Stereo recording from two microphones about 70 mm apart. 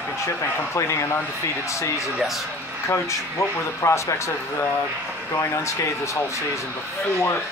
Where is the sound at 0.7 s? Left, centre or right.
Left.